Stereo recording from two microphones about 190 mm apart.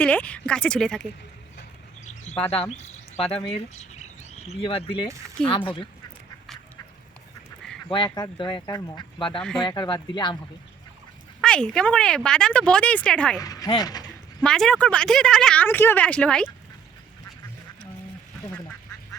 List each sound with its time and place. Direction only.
0.0 s speech: 5° left (ahead or behind)
2.6 s a sound: 35° left (ahead or behind)
3.8 s bird: 35° left (ahead or behind)
5.5 s speech: 25° left (ahead or behind)
7.9 s speech: 25° left (ahead or behind)
11.3 s speech: 5° left (ahead or behind)
13.4 s speech: 20° left (ahead or behind)
14.4 s speech: 5° left (ahead or behind)